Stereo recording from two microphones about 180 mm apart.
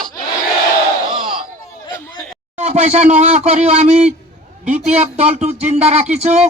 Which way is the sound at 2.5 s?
40° right (ahead or behind).